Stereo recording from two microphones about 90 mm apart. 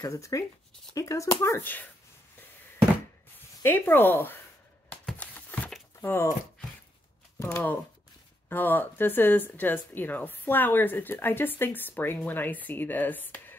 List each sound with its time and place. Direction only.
0.0 s speech: 35° left (ahead or behind); by 1.9 s 20° left (ahead or behind)
3.6 s speech: 20° left (ahead or behind)
5.2 s a sound: 15° left (ahead or behind)
5.9 s speech: 30° left (ahead or behind)
8.5 s speech: 20° left (ahead or behind)